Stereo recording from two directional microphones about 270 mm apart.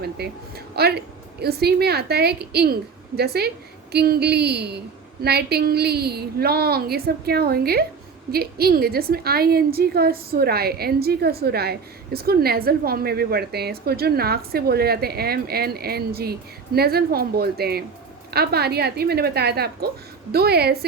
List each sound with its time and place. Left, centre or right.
0.0 s a woman's voice: right